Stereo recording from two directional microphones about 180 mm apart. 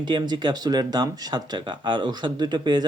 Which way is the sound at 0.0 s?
25° right (ahead or behind).